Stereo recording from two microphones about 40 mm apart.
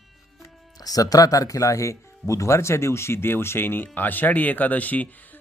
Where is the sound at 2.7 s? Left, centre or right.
Left.